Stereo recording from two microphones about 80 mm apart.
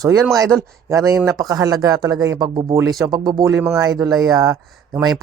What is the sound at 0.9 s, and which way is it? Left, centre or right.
Speech, right.